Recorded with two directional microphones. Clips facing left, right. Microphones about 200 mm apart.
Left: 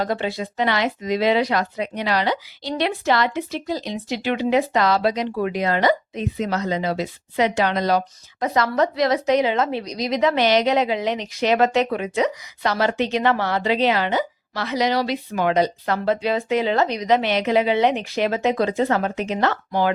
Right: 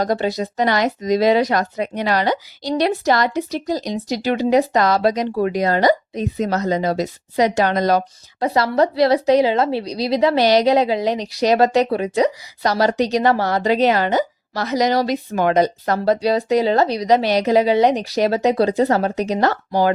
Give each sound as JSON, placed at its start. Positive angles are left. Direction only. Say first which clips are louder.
{"t": 0.0, "sound": "a woman's voice", "louder": "right 4 dB", "side_deg": -40}
{"t": 8.4, "sound": "a woman's voice", "louder": "right 3 dB", "side_deg": -35}